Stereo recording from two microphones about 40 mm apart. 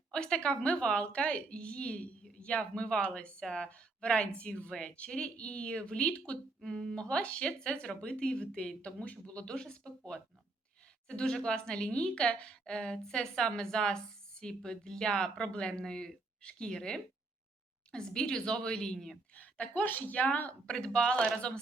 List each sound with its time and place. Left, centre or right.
0.1 s a woman's voice: left
6.7 s speech: centre
7.0 s a woman's voice: left
11.1 s a woman's voice: centre
19.3 s speech: left
20.7 s a woman's voice: left